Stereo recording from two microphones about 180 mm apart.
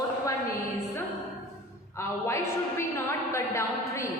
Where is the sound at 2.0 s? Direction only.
15° left (ahead or behind).